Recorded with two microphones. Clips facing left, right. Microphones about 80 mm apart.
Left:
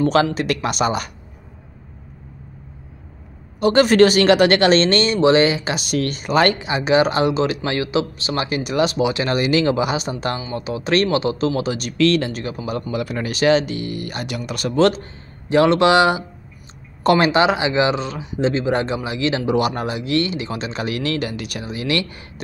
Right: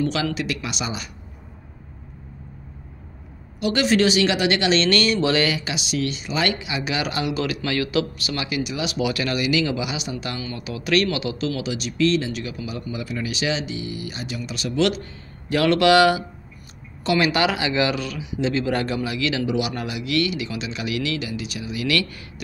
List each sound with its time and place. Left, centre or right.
0.0 s speech: left
3.5 s speech: left
4.8 s speech: left
8.9 s speech: left
10.4 s speech: left
12.0 s speech: left
12.3 s speech: left
12.9 s speech: left
15.4 s speech: left
17.0 s speech: left
17.3 s speech: left
18.2 s speech: left
18.5 s speech: left
21.7 s speech: left